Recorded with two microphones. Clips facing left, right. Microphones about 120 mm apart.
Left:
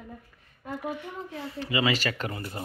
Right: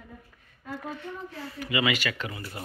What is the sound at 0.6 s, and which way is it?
Speech, 15° left (ahead or behind).